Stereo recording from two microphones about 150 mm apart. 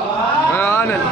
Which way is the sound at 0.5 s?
15° left (ahead or behind).